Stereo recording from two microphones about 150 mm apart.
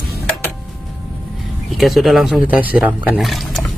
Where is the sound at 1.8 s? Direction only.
Centre (ahead or behind).